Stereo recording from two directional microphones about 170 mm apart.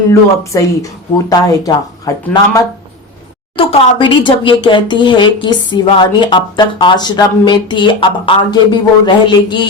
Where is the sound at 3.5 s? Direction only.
30° left (ahead or behind).